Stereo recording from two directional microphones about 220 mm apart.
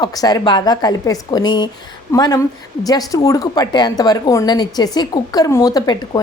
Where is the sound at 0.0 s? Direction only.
15° left (ahead or behind).